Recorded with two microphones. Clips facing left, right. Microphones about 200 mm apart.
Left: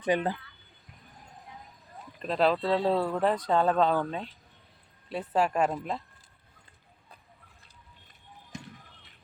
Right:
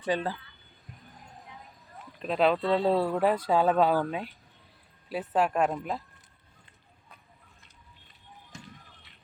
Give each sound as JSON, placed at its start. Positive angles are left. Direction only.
{"t": 0.0, "sound": "speech", "side_deg": 15}
{"t": 2.1, "sound": "speech", "side_deg": 0}